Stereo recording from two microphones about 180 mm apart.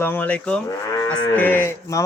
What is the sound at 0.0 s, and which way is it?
Speech, 10° left (ahead or behind).